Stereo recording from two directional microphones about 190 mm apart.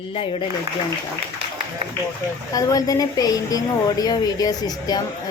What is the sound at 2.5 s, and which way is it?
Mantra, 20° left (ahead or behind).